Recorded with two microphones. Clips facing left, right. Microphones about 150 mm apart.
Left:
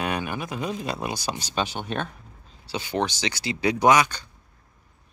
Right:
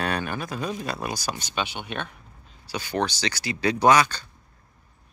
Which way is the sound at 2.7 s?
20° left (ahead or behind).